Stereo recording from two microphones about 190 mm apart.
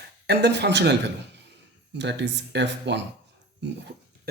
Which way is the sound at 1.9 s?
65° right (ahead or behind).